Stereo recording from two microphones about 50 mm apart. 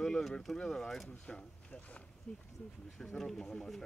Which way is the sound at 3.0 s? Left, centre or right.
Centre.